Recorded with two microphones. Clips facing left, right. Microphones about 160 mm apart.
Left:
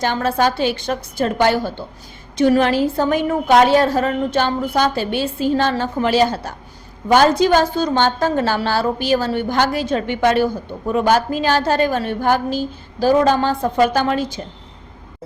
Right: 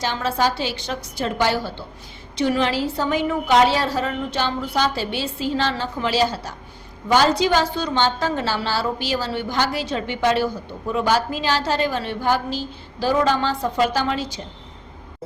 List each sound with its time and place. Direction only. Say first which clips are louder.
0.0 s a woman's voice: left 4 dB; 55° left (ahead or behind)